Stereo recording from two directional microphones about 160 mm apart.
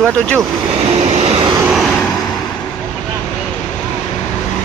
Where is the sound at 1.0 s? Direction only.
40° right (ahead or behind).